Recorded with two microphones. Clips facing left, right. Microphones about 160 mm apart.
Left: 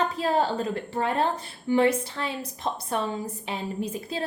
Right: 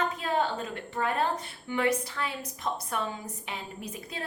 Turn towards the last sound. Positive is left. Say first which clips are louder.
# left 8 dB
turn(degrees=30)  # may be behind; listen again after turning